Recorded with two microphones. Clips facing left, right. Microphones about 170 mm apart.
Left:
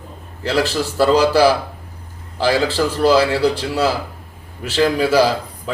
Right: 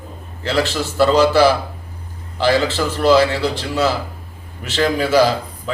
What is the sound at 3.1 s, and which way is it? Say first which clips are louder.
Speech: right 1 dB; 10° left (ahead or behind).